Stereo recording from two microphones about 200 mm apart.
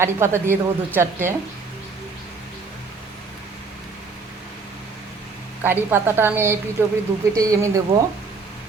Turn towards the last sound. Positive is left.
turn(degrees=-15)  # may be behind; listen again after turning